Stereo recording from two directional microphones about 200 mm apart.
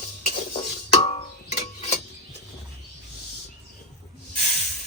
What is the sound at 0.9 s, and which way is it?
Music, 35° left (ahead or behind).